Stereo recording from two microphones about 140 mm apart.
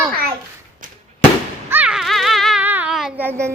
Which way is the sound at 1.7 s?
15° right (ahead or behind).